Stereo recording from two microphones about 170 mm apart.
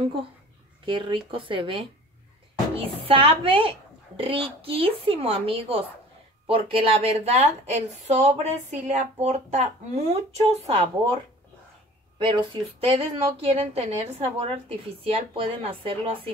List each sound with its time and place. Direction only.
0.0 s a woman's voice: 30° right (ahead or behind)
12.2 s a woman's voice: 30° right (ahead or behind)